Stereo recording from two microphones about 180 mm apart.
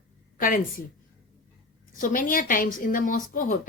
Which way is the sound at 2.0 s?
50° left (ahead or behind).